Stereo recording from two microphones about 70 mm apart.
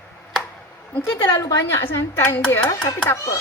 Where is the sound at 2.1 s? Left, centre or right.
Left.